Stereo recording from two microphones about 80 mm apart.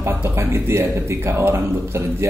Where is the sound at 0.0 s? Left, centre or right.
Right.